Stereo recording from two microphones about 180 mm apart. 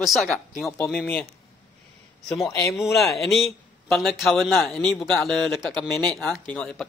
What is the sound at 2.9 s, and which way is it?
A man's voice, centre (ahead or behind).